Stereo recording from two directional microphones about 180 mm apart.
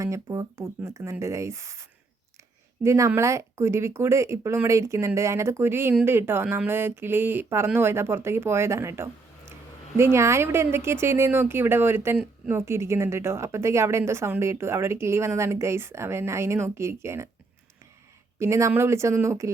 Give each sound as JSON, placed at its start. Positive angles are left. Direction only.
{"t": 0.0, "sound": "speech", "side_deg": -15}
{"t": 18.3, "sound": "speech", "side_deg": -15}